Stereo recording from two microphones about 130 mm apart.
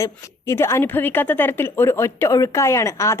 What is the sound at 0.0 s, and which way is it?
A woman's voice, 20° left (ahead or behind).